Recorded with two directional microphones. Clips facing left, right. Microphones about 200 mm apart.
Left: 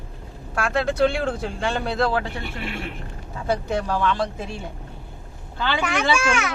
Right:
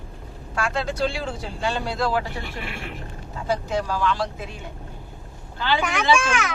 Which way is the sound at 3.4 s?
60° left (ahead or behind).